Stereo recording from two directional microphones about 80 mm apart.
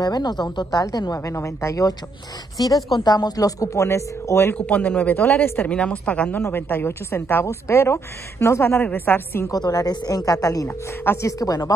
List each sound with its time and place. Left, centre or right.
0.0 s speech: left
2.5 s speech: left
4.6 s a woman's voice: centre
6.4 s a woman's voice: left
9.5 s speech: left